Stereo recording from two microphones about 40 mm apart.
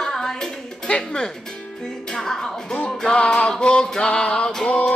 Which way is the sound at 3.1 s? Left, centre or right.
Left.